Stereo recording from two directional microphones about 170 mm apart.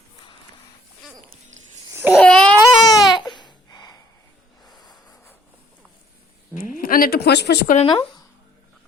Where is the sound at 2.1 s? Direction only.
5° left (ahead or behind).